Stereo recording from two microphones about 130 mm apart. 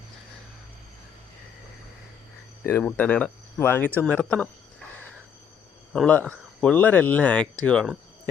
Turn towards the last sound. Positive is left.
turn(degrees=5)  # may be behind; listen again after turning